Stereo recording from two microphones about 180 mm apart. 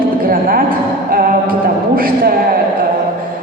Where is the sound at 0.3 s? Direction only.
55° right (ahead or behind).